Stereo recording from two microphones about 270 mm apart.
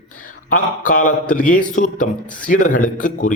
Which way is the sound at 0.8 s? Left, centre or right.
Left.